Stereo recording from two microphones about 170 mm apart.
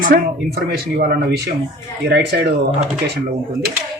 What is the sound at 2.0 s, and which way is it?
Speech, 80° right.